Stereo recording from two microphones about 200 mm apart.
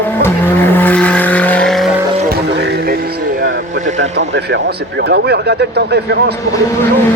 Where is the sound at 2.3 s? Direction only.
60° right (ahead or behind).